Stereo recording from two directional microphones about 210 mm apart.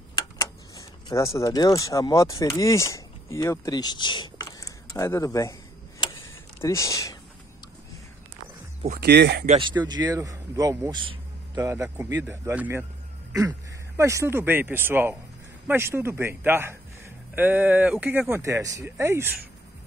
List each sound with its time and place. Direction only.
0.1 s a sound: 20° left (ahead or behind)
9.0 s speech: 55° right (ahead or behind)
9.5 s a man's voice: 20° right (ahead or behind)